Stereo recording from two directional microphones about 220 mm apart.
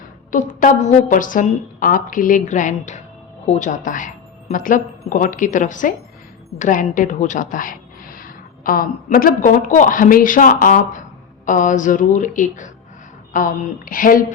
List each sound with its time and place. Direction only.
0.3 s a woman's voice: 35° left (ahead or behind)